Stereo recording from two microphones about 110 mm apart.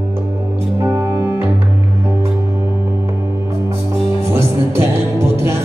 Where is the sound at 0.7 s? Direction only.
25° right (ahead or behind).